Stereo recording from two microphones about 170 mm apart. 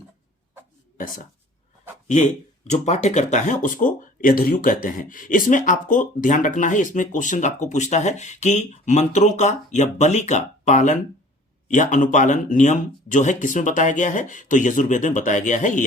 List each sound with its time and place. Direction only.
0.9 s speech: 55° left (ahead or behind)